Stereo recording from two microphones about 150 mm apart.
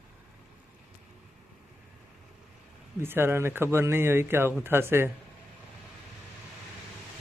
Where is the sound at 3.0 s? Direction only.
15° right (ahead or behind).